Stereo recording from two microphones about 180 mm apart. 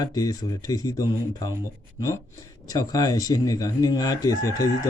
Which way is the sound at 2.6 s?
20° left (ahead or behind).